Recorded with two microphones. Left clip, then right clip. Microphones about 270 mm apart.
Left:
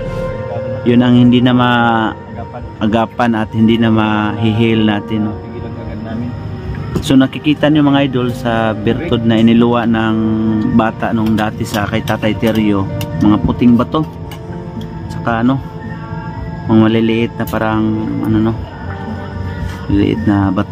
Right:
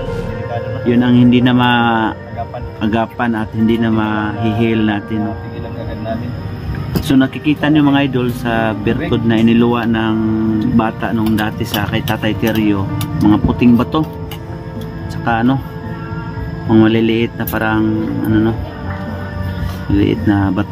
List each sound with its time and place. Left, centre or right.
0.8 s a man's voice: centre
7.1 s speech: centre
15.2 s speech: centre
16.6 s speech: centre
19.9 s speech: centre